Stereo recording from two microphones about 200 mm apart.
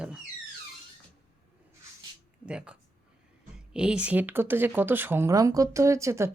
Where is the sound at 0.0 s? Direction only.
5° right (ahead or behind).